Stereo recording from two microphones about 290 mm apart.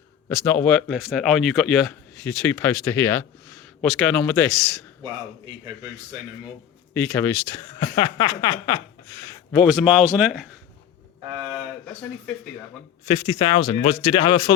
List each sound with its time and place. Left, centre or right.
0.3 s speech: centre
6.9 s speech: centre
9.5 s speech: centre
11.9 s speech: centre
13.1 s speech: centre